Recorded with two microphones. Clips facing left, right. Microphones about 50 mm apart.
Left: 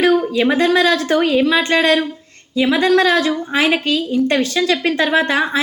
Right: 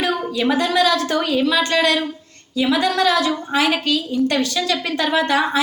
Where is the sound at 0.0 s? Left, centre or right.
Left.